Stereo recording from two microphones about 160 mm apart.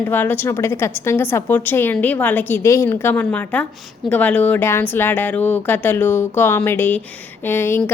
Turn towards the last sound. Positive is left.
turn(degrees=15)  # may be behind; listen again after turning